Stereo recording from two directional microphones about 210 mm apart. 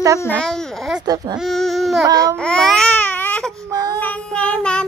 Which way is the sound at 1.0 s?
20° right (ahead or behind).